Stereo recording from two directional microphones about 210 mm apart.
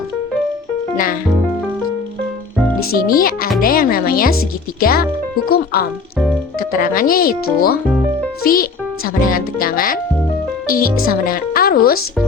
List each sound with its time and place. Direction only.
2.9 s speech: 45° left (ahead or behind)